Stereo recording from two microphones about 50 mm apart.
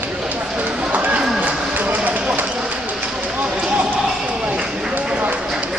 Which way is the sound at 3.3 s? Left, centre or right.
Right.